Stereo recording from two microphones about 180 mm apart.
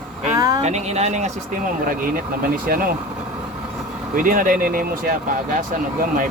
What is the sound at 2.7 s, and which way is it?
Speech, 50° right (ahead or behind).